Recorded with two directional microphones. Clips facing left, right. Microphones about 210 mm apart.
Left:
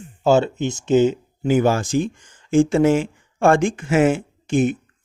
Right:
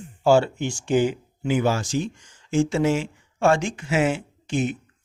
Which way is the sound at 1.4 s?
50° left (ahead or behind).